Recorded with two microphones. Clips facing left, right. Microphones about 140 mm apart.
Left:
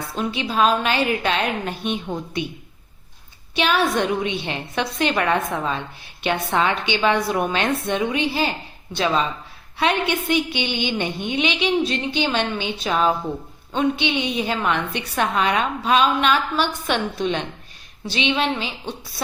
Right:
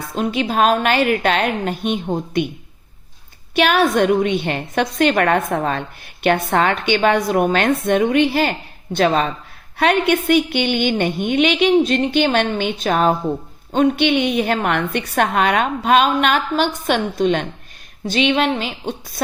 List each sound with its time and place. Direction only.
0.1 s a woman's voice: 45° right (ahead or behind)
3.5 s a woman's voice: 55° right (ahead or behind)